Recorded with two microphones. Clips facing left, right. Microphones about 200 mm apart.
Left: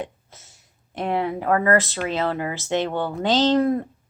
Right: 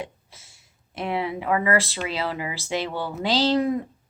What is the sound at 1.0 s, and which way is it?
A woman's voice, 40° left (ahead or behind).